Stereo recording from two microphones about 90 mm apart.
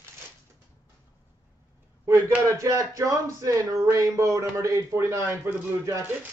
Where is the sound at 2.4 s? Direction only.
40° right (ahead or behind); by 5.7 s 25° right (ahead or behind).